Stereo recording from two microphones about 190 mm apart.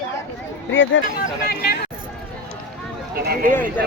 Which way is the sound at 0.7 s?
80° left.